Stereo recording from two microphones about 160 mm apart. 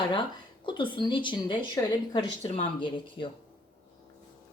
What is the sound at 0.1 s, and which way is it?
Speech, 30° left (ahead or behind).